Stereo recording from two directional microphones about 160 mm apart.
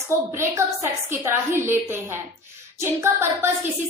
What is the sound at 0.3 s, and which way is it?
A woman's voice, 15° right (ahead or behind).